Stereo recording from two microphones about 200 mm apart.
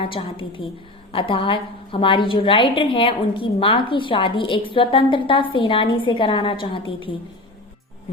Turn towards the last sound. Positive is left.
turn(degrees=25)  # may be behind; listen again after turning